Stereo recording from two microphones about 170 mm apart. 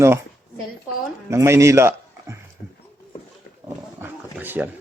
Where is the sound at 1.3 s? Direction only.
15° right (ahead or behind).